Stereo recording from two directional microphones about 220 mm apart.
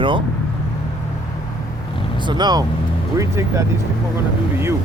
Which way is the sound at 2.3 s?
20° right (ahead or behind).